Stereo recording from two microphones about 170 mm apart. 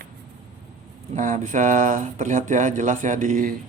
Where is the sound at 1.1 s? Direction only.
50° right (ahead or behind).